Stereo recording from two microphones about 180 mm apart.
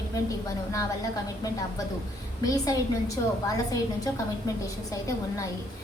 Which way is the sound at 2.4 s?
20° left (ahead or behind).